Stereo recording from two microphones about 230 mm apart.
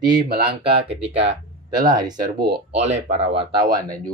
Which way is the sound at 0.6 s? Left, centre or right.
Right.